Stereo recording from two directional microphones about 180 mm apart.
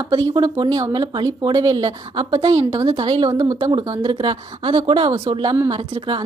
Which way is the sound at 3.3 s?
15° right (ahead or behind).